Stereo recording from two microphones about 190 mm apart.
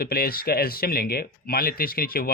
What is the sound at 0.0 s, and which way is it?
Speech, 55° left (ahead or behind).